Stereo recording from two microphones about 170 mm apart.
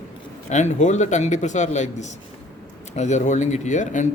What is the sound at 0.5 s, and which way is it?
Speech, 45° left (ahead or behind).